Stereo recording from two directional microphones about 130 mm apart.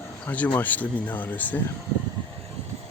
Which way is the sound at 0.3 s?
10° left (ahead or behind).